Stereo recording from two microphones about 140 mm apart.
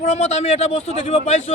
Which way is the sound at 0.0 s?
50° left (ahead or behind).